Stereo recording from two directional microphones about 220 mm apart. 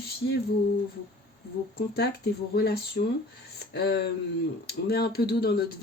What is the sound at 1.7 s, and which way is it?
Speech, 45° left (ahead or behind).